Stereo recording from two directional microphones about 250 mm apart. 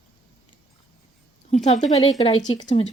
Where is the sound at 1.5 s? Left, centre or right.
Left.